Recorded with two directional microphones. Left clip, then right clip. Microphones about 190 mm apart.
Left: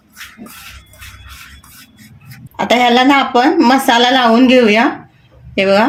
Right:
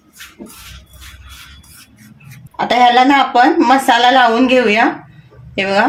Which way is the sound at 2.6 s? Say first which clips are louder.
Right 1 dB; 40° left (ahead or behind).